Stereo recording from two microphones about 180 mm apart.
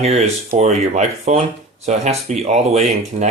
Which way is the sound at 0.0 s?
40° right (ahead or behind).